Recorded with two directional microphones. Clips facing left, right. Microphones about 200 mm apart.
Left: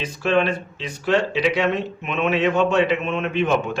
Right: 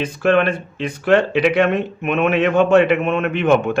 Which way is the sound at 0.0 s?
55° right (ahead or behind).